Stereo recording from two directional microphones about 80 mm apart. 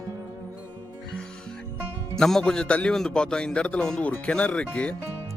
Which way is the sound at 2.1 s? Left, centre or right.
Centre.